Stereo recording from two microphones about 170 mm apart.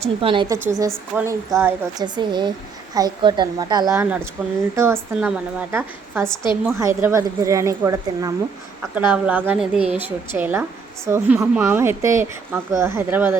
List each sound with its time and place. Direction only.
0.0 s a woman's voice: 30° right (ahead or behind)
0.4 s a woman's voice: 20° right (ahead or behind)